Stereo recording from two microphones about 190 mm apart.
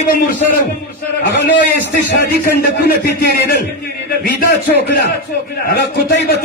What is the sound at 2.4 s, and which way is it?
Speech, 50° left (ahead or behind).